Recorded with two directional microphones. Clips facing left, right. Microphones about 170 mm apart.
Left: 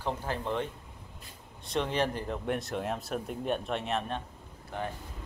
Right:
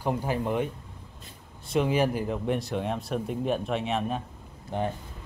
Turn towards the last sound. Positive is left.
turn(degrees=-20)  # may be behind; listen again after turning